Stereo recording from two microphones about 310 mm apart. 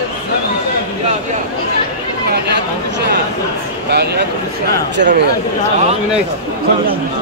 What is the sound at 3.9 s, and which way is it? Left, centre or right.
Speech, right.